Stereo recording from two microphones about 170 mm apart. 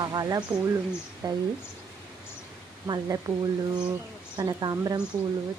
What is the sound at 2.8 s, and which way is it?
Speech, 25° right (ahead or behind).